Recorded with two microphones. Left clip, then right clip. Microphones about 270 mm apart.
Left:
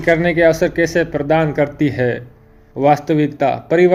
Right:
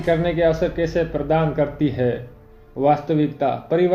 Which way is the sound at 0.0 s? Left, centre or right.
Left.